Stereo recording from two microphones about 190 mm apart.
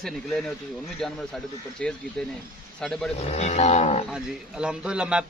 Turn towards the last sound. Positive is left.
turn(degrees=-5)  # may be behind; listen again after turning